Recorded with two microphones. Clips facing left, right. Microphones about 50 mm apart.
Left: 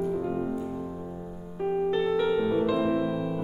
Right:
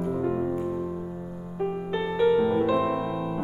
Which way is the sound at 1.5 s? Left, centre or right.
Centre.